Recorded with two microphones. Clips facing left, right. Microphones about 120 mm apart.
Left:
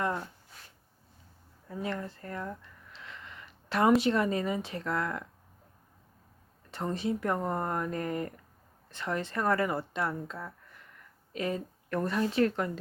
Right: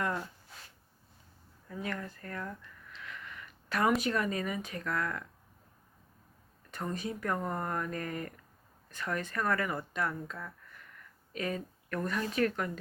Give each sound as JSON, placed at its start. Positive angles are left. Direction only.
{"t": 1.7, "sound": "speech", "side_deg": 25}
{"t": 6.7, "sound": "speech", "side_deg": 25}